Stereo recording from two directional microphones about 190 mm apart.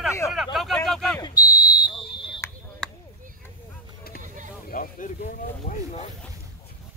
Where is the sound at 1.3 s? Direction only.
50° left (ahead or behind).